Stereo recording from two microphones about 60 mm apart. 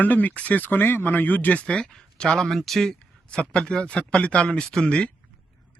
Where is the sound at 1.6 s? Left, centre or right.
Centre.